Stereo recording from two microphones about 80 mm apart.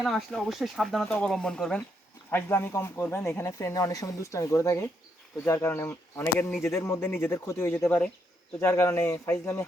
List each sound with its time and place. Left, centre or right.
0.0 s speech: centre
1.0 s speech: centre
2.3 s speech: left
8.8 s speech: left